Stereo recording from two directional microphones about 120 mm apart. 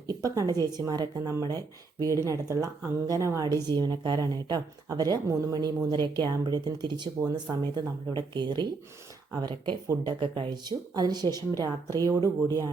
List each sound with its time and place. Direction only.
0.1 s a woman's voice: 30° right (ahead or behind)